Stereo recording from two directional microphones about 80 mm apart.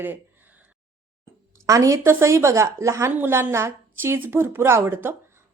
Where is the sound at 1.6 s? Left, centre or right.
Right.